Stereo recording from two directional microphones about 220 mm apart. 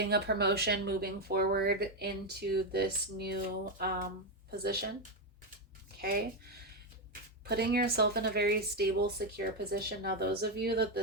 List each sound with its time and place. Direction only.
0.0 s speech: 45° right (ahead or behind)
6.0 s speech: 45° right (ahead or behind)